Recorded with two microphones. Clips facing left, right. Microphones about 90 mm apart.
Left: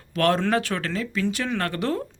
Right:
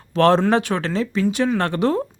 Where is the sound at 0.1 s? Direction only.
30° right (ahead or behind).